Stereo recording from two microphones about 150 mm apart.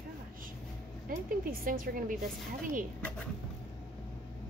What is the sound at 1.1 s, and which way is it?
Speech, 70° right (ahead or behind).